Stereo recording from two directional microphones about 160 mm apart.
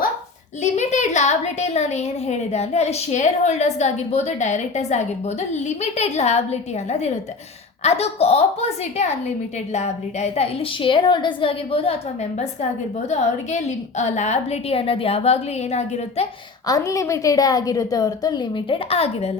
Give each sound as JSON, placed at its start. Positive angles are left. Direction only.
{"t": 0.6, "sound": "a woman's voice", "side_deg": 45}
{"t": 13.1, "sound": "a woman's voice", "side_deg": 45}
{"t": 16.6, "sound": "a woman's voice", "side_deg": 20}